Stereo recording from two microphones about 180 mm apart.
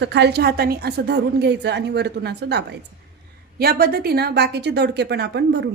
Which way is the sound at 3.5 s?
55° right (ahead or behind).